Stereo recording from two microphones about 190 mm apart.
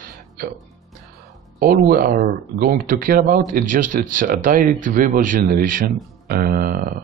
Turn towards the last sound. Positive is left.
turn(degrees=-50)  # may be behind; listen again after turning